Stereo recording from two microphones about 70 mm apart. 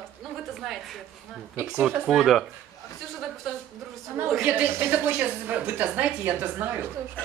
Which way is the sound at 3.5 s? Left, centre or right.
Centre.